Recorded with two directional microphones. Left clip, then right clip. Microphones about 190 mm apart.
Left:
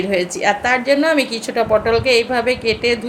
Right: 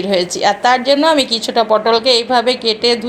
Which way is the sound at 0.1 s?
15° right (ahead or behind).